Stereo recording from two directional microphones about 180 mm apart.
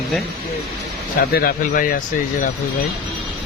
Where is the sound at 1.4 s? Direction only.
50° left (ahead or behind).